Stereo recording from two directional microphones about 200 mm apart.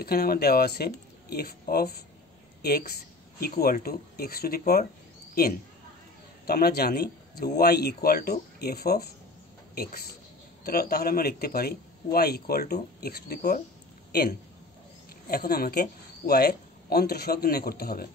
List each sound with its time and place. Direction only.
0.0 s a man's voice: 50° left (ahead or behind)
6.4 s a man's voice: 50° left (ahead or behind)
15.2 s a man's voice: 50° left (ahead or behind)